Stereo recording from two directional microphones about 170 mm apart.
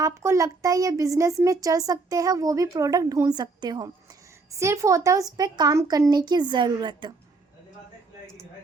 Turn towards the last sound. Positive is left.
turn(degrees=-25)  # may be behind; listen again after turning